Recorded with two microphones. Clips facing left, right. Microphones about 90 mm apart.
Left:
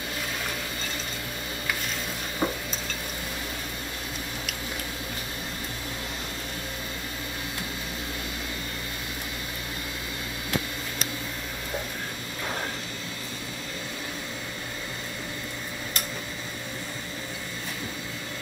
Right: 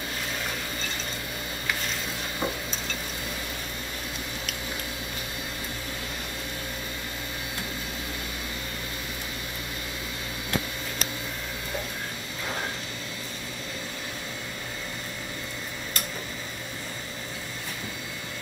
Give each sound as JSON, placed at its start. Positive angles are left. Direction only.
{"t": 2.4, "sound": "stir", "side_deg": 15}